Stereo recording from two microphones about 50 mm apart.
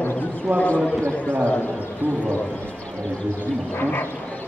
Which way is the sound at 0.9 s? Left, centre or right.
Left.